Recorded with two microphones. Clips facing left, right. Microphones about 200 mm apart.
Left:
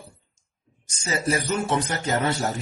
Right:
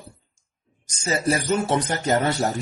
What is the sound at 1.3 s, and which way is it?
Speech, 35° right (ahead or behind).